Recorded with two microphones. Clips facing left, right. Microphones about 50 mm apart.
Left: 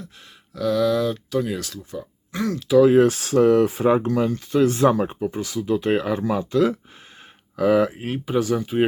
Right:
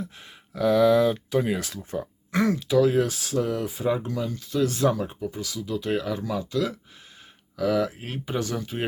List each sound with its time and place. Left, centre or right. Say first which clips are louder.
0.5 s speech: right 1 dB; centre
1.9 s speech: right 3 dB; right
2.6 s speech: left 10 dB; centre
2.9 s speech: left 8 dB; left
7.9 s speech: left 7 dB; centre